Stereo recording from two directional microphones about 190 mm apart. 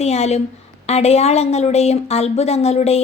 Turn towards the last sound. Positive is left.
turn(degrees=35)  # may be behind; listen again after turning